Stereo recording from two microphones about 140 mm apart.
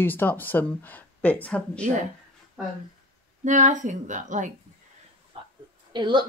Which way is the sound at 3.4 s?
60° right (ahead or behind).